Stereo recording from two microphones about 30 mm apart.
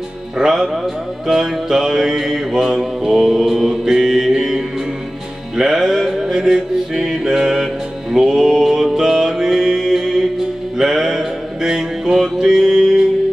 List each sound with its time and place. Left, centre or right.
0.4 s music: centre
3.1 s mantra: centre
4.4 s music: centre
12.4 s mantra: centre